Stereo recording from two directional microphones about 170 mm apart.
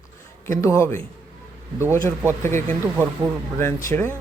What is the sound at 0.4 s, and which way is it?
Speech, 15° left (ahead or behind).